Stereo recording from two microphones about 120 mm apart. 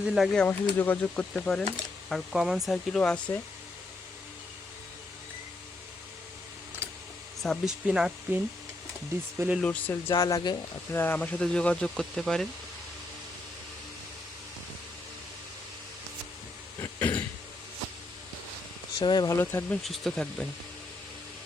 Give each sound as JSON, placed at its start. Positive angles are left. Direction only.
{"t": 0.0, "sound": "speech", "side_deg": 0}
{"t": 0.4, "sound": "speech", "side_deg": 15}
{"t": 7.4, "sound": "speech", "side_deg": 5}
{"t": 9.6, "sound": "speech", "side_deg": 10}
{"t": 10.1, "sound": "speech", "side_deg": 30}
{"t": 10.9, "sound": "speech", "side_deg": 15}
{"t": 16.8, "sound": "throat clearing", "side_deg": 15}
{"t": 18.9, "sound": "speech", "side_deg": 35}
{"t": 19.4, "sound": "speech", "side_deg": 20}
{"t": 19.8, "sound": "speech", "side_deg": 0}